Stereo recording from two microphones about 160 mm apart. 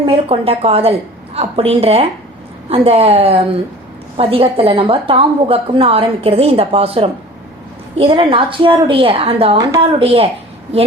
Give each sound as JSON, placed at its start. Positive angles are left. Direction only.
{"t": 0.0, "sound": "a woman's voice", "side_deg": -35}